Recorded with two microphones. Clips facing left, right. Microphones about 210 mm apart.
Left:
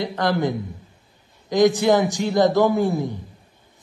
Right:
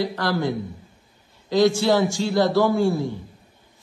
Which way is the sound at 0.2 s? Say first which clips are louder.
Left 2 dB; 20° left (ahead or behind).